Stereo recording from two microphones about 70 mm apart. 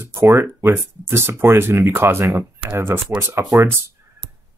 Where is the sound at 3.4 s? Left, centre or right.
Right.